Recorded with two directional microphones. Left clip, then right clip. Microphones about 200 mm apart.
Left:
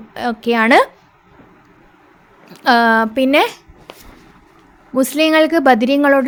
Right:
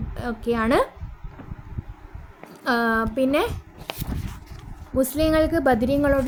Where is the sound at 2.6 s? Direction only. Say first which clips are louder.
Left 10 dB; 25° left (ahead or behind).